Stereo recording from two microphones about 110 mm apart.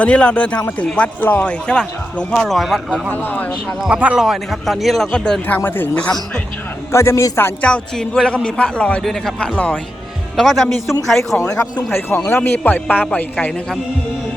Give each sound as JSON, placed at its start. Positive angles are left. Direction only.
{"t": 0.0, "sound": "speech", "side_deg": 10}
{"t": 2.9, "sound": "speech", "side_deg": 15}
{"t": 3.8, "sound": "speech", "side_deg": -10}
{"t": 6.9, "sound": "a man's voice", "side_deg": 25}
{"t": 7.7, "sound": "speech", "side_deg": 5}
{"t": 10.3, "sound": "speech", "side_deg": 0}
{"t": 11.9, "sound": "a man's voice", "side_deg": 20}